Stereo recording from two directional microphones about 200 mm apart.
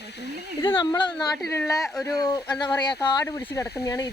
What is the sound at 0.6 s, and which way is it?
Speech, 20° left (ahead or behind).